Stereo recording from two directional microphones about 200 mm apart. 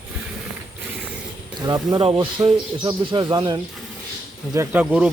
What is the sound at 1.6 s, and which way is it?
A man's voice, 20° right (ahead or behind).